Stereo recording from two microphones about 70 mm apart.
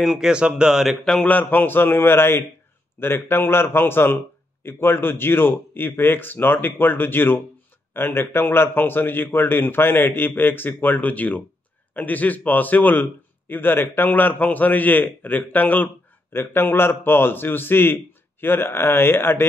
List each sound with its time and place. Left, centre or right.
0.0 s speech: centre
1.0 s a man's voice: centre; by 19.4 s left